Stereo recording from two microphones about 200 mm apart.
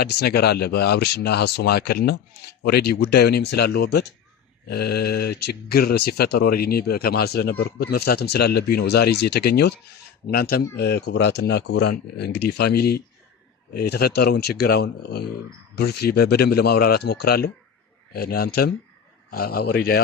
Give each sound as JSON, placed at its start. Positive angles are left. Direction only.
{"t": 0.0, "sound": "speech", "side_deg": 55}